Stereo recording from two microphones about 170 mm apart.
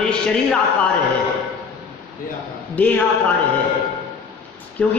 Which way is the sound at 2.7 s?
10° left (ahead or behind).